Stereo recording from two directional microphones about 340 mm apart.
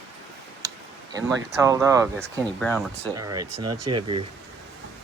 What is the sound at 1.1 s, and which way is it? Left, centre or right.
Speech, centre.